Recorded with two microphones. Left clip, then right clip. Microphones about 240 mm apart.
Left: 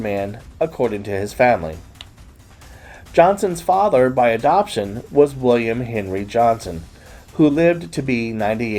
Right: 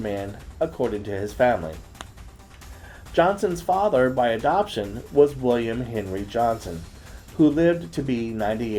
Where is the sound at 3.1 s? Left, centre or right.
Left.